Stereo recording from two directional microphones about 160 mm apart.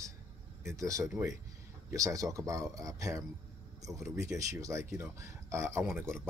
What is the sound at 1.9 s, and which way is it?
Speech, 20° right (ahead or behind).